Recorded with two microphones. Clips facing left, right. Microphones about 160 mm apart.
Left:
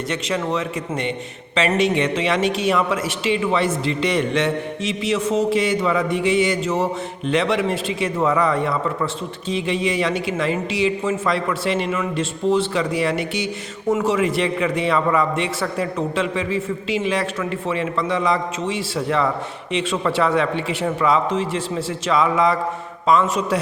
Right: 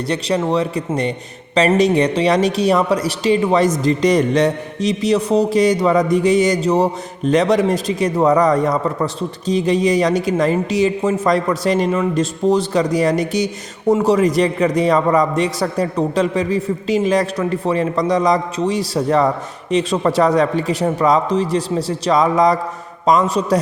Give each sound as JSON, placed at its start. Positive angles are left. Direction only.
{"t": 0.1, "sound": "speech", "side_deg": -35}